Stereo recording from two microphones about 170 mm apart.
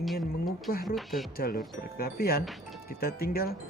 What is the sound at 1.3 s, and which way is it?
Speech, 60° left (ahead or behind).